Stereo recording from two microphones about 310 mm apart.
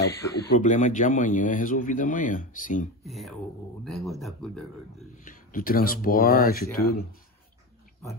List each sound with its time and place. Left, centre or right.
0.0 s speech: left
3.1 s speech: centre
5.2 s speech: left